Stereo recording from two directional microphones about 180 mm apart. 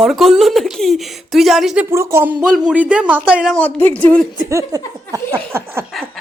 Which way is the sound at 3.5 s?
10° left (ahead or behind).